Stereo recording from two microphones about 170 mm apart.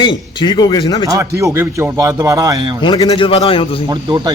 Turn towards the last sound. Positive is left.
turn(degrees=-35)  # may be behind; listen again after turning